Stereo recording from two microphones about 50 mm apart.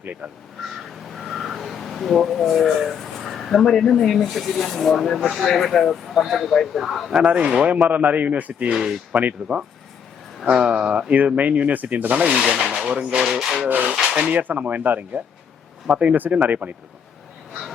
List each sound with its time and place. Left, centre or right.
1.1 s speech: centre
7.2 s speech: right
7.8 s a man's voice: right
8.7 s speech: centre
10.4 s a man's voice: centre
12.5 s speech: centre
12.9 s speech: right
13.4 s speech: centre
13.7 s a man's voice: right
13.9 s speech: centre
14.3 s a man's voice: right